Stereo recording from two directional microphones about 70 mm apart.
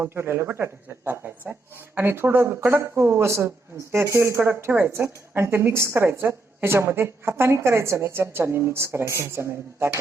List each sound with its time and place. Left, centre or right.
0.0 s a woman's voice: right